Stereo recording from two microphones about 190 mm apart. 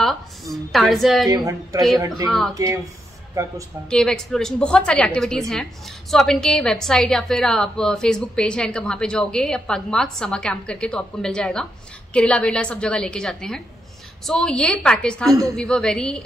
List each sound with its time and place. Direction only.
0.0 s a woman's voice: centre (ahead or behind)
1.3 s a woman's voice: 20° right (ahead or behind)
2.2 s a woman's voice: centre (ahead or behind)
2.5 s a woman's voice: 15° right (ahead or behind)
3.9 s a woman's voice: 5° left (ahead or behind)
15.2 s a woman's voice: 20° right (ahead or behind)
15.5 s a woman's voice: 5° left (ahead or behind)